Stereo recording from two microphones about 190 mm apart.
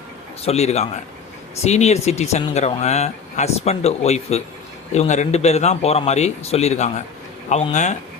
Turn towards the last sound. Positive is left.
turn(degrees=40)  # may be behind; listen again after turning